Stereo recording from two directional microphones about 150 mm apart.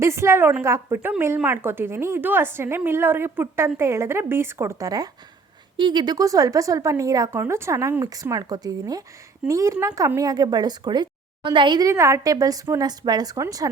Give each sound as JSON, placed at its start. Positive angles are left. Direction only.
{"t": 0.0, "sound": "a woman's voice", "side_deg": -20}